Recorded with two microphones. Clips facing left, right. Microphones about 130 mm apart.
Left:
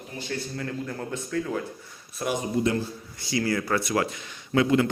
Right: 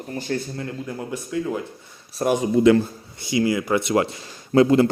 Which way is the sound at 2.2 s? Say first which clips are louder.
Right 8 dB; 40° right (ahead or behind).